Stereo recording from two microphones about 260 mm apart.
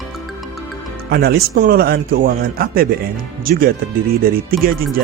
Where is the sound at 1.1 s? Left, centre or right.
Right.